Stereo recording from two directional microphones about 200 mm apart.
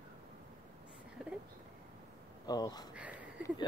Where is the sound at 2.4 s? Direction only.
20° left (ahead or behind).